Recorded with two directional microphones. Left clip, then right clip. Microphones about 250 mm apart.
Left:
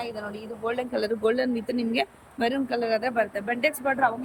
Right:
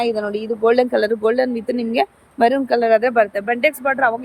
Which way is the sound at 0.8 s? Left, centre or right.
Centre.